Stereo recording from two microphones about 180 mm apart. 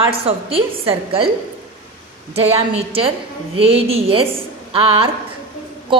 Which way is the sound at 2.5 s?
30° right (ahead or behind).